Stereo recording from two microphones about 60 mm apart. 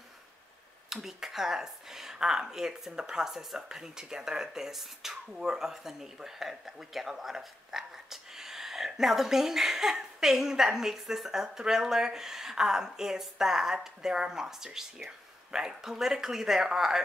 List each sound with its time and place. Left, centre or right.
1.0 s speech: centre